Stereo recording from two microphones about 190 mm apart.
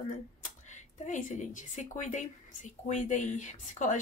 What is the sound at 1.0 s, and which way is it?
A woman's voice, 40° left (ahead or behind).